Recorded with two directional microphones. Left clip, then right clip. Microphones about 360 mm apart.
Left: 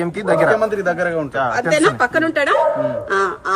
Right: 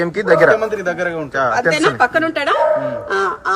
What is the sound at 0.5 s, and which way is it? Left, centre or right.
Speech, left.